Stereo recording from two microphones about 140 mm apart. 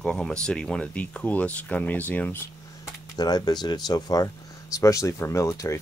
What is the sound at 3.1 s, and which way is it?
Speech, 30° left (ahead or behind).